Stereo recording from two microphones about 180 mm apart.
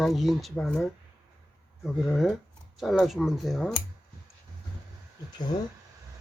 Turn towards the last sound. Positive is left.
turn(degrees=25)  # may be behind; listen again after turning